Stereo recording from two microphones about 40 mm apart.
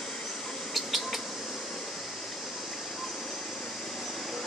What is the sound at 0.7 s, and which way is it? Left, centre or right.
Bird, centre.